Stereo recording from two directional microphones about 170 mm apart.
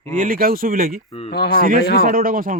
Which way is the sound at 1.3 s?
70° left (ahead or behind).